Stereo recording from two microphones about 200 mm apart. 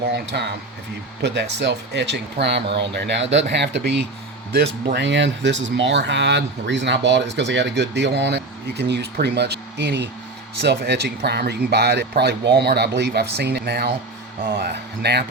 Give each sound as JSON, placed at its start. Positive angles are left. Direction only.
{"t": 0.3, "sound": "speech", "side_deg": -55}
{"t": 1.5, "sound": "speech", "side_deg": -60}